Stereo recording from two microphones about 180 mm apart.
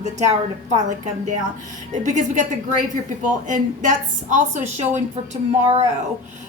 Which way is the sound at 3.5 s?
45° right (ahead or behind).